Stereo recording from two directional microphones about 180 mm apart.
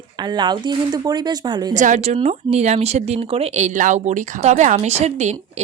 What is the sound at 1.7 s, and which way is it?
A woman's voice, 45° right (ahead or behind).